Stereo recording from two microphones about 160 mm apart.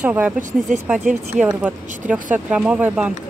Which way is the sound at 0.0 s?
10° right (ahead or behind).